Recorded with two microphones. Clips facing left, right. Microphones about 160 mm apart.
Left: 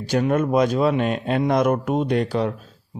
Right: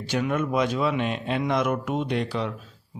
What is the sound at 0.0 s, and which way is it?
Speech, 40° left (ahead or behind).